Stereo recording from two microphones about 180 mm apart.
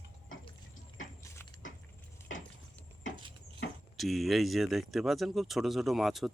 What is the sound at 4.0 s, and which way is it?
Speech, centre (ahead or behind).